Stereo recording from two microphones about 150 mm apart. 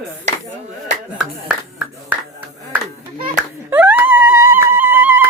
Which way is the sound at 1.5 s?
10° right (ahead or behind).